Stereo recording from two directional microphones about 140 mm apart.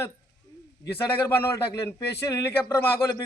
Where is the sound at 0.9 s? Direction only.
15° left (ahead or behind).